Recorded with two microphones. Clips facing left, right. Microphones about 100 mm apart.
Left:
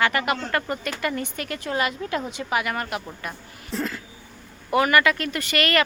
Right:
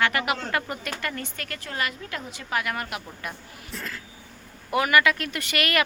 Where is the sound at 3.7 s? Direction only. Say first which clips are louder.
Left 8 dB; 25° left (ahead or behind).